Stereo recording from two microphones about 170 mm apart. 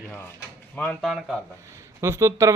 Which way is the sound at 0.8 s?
Centre (ahead or behind).